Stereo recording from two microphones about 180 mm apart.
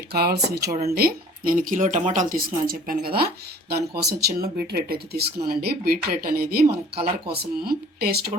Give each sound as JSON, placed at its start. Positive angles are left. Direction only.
{"t": 0.1, "sound": "speech", "side_deg": -60}
{"t": 6.9, "sound": "speech", "side_deg": -30}
{"t": 7.3, "sound": "speech", "side_deg": -55}